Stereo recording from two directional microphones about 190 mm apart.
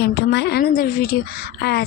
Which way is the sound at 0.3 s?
60° left (ahead or behind).